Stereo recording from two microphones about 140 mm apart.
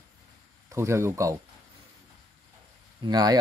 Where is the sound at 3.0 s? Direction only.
30° right (ahead or behind).